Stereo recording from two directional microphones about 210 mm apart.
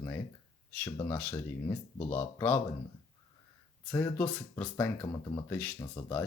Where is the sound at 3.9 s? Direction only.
10° left (ahead or behind).